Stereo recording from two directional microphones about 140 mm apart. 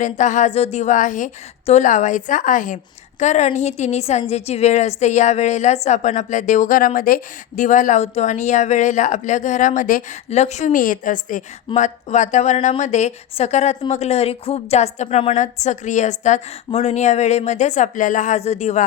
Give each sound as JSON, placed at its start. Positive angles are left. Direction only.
{"t": 0.0, "sound": "a woman's voice", "side_deg": 60}
{"t": 3.2, "sound": "a woman's voice", "side_deg": 55}